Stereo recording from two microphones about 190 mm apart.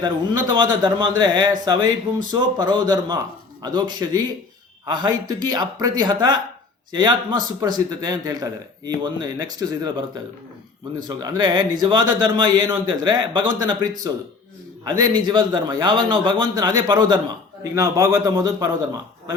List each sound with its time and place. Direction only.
0.0 s a man's voice: 25° right (ahead or behind)
11.2 s a man's voice: 20° right (ahead or behind)